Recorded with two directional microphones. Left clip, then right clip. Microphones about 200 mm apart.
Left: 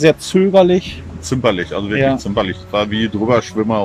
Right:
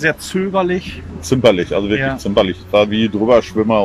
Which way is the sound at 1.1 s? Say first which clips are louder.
Right 4 dB; 10° right (ahead or behind).